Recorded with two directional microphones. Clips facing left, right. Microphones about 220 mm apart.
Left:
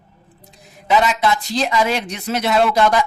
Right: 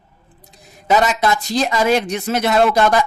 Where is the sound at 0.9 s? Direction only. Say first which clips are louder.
Right 1 dB; 45° right (ahead or behind).